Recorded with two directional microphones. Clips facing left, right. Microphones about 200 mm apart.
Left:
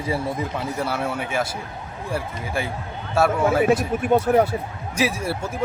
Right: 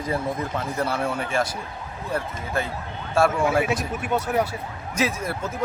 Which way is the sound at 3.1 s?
5° left (ahead or behind).